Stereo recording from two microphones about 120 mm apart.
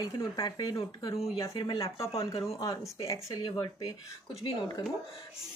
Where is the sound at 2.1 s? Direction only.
50° left (ahead or behind).